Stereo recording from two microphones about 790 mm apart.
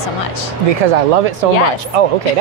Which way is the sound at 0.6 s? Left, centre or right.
Right.